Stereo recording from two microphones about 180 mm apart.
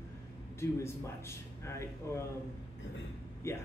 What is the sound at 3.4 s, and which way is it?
Speech, 15° left (ahead or behind).